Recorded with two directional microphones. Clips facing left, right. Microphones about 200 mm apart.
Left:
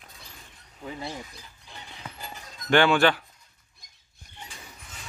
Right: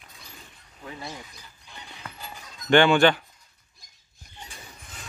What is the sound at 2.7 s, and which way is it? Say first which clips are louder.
Speech: right 2 dB; centre (ahead or behind).